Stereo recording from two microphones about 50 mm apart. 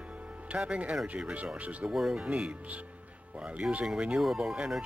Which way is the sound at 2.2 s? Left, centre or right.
Right.